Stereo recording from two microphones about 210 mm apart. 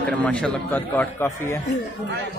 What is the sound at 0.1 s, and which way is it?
A man's voice, 5° left (ahead or behind).